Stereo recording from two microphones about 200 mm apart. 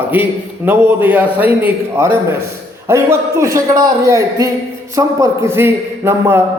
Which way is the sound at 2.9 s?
15° right (ahead or behind).